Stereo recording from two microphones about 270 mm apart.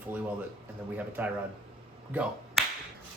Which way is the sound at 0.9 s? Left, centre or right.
Centre.